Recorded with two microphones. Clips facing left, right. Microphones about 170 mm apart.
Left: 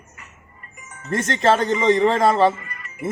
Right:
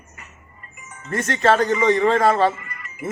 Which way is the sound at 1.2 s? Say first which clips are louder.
Right 1 dB; 25° left (ahead or behind).